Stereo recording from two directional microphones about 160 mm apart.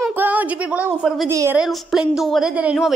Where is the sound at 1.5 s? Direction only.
5° right (ahead or behind).